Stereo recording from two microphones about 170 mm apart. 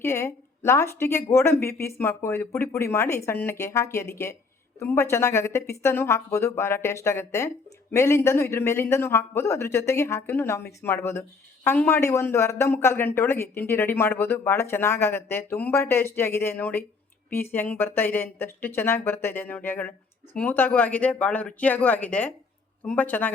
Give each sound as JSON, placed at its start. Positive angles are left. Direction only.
{"t": 0.0, "sound": "speech", "side_deg": 15}